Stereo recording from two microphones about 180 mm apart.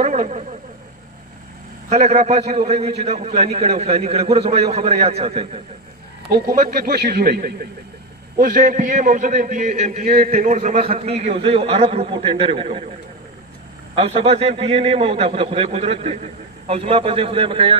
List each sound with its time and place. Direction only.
0.0 s a sound: 40° right (ahead or behind)
1.9 s a man's voice: 40° right (ahead or behind)
6.5 s a man's voice: 50° right (ahead or behind); by 12.8 s 30° right (ahead or behind)
13.9 s a man's voice: 35° right (ahead or behind)